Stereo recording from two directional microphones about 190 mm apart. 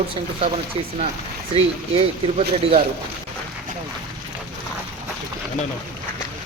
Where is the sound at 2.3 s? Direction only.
30° right (ahead or behind).